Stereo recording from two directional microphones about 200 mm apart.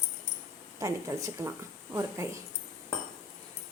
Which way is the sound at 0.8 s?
15° right (ahead or behind).